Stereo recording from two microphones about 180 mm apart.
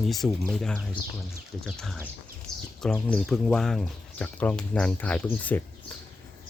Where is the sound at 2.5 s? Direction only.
5° left (ahead or behind).